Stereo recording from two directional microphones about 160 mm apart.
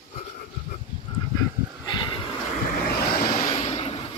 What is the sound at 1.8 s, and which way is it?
Vehicle, 30° left (ahead or behind).